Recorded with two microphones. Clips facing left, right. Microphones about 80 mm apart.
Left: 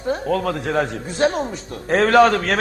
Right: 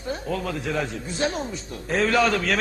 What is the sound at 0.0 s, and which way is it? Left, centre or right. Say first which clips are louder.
A man's voice: left 7 dB; left.